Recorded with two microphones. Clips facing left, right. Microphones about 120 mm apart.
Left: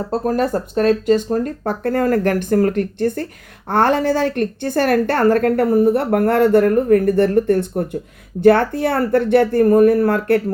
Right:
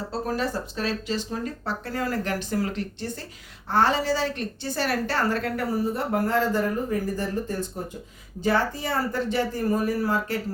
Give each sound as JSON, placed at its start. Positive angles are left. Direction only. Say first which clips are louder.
{"t": 0.1, "sound": "a woman's voice", "louder": "left 10 dB", "side_deg": 50}